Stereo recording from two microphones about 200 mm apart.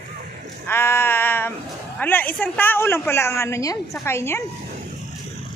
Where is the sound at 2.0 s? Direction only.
10° left (ahead or behind).